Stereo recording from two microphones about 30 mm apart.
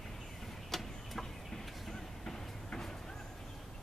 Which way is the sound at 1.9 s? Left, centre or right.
Centre.